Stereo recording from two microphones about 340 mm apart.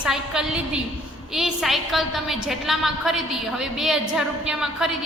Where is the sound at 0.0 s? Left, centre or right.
Centre.